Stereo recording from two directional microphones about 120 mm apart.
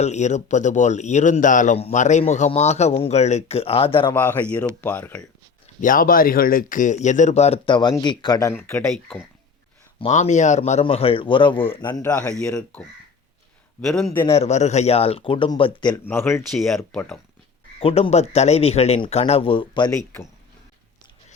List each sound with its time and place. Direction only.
0.0 s a man's voice: 75° left (ahead or behind); by 4.1 s 50° left (ahead or behind)
4.1 s speech: 15° left (ahead or behind)
6.7 s a man's voice: 90° left; by 8.5 s 30° left (ahead or behind)
8.5 s speech: 20° left (ahead or behind)
10.1 s a man's voice: 80° left
10.6 s a man's voice: 60° left (ahead or behind); by 12.1 s 35° left (ahead or behind)
12.1 s speech: 10° left (ahead or behind)
13.8 s speech: 5° left (ahead or behind)
14.3 s speech: 60° left (ahead or behind); by 16.0 s 40° left (ahead or behind)
16.0 s speech: 20° left (ahead or behind)
16.4 s speech: centre (ahead or behind)
17.7 s a man's voice: 50° left (ahead or behind)